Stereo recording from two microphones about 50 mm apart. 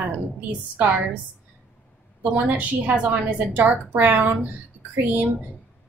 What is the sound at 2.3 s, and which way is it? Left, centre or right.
A woman's voice, right.